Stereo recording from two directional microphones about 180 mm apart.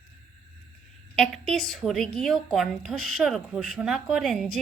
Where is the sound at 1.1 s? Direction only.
5° left (ahead or behind).